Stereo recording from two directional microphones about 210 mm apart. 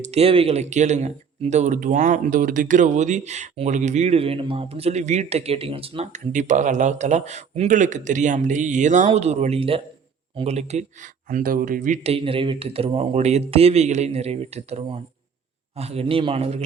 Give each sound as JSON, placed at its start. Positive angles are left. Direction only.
{"t": 0.1, "sound": "speech", "side_deg": -30}